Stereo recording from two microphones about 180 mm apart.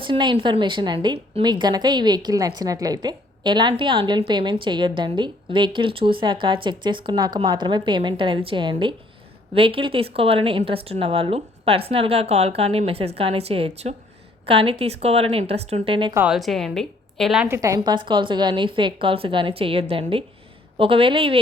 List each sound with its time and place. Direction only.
0.0 s a woman's voice: 25° right (ahead or behind)
16.1 s a woman's voice: 5° right (ahead or behind)
17.6 s a woman's voice: 20° right (ahead or behind)